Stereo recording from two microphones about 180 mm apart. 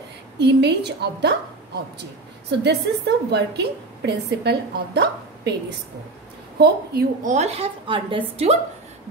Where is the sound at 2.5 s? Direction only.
70° right (ahead or behind).